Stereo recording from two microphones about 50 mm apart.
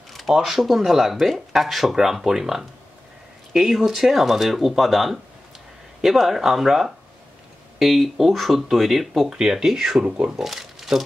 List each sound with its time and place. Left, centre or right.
0.3 s speech: centre
10.0 s speech: right
10.3 s speech: centre